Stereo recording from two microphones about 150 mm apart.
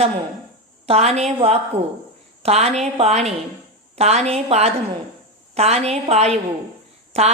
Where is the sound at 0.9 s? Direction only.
45° right (ahead or behind).